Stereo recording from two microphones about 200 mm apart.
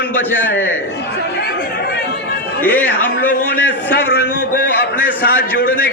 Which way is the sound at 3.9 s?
55° left (ahead or behind).